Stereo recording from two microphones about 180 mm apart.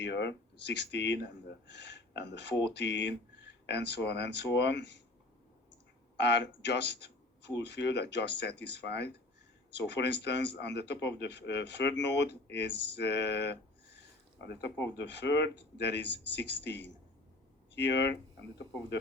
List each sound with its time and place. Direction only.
0.0 s speech: 75° left (ahead or behind)
6.1 s speech: 70° left (ahead or behind)